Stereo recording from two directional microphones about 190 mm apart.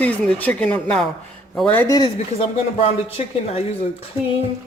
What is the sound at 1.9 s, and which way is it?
Speech, 25° left (ahead or behind).